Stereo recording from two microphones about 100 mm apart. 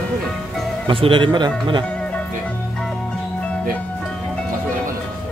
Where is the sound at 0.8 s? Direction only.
55° right (ahead or behind).